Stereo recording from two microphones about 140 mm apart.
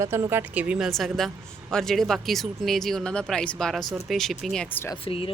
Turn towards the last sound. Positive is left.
turn(degrees=40)  # may be behind; listen again after turning